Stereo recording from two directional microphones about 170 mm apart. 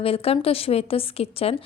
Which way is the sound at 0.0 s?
35° left (ahead or behind).